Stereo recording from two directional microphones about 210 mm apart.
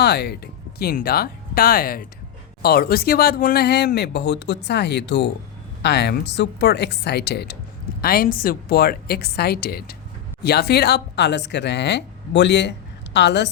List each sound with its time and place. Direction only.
0.0 s speech: 50° left (ahead or behind)